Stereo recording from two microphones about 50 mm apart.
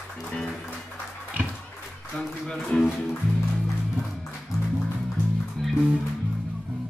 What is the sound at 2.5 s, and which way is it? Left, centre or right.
Music, centre.